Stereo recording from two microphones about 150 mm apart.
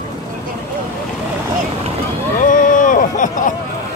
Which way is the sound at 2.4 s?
60° left (ahead or behind).